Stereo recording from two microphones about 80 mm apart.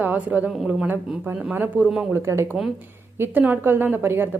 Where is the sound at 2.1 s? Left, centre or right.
Right.